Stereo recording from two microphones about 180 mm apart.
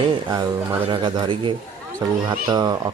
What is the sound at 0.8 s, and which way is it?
Speech, 25° right (ahead or behind).